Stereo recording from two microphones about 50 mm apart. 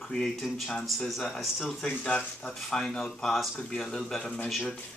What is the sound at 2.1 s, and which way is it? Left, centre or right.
Speech, centre.